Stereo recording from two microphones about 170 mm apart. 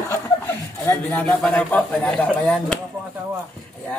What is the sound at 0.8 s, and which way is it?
Speech, 10° left (ahead or behind).